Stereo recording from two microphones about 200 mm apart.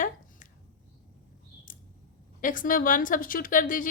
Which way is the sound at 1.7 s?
40° left (ahead or behind).